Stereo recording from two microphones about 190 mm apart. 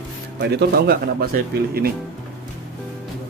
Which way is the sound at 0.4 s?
60° right (ahead or behind).